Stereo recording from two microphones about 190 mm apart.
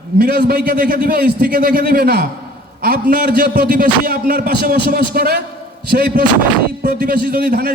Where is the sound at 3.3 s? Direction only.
50° right (ahead or behind).